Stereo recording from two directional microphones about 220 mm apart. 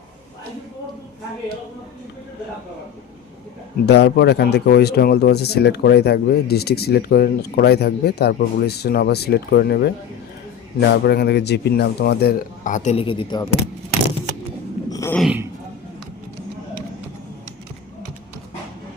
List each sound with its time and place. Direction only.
3.8 s speech: 50° left (ahead or behind); by 13.5 s 20° left (ahead or behind)
14.8 s a sound: 15° left (ahead or behind)
15.1 s speech: 5° right (ahead or behind)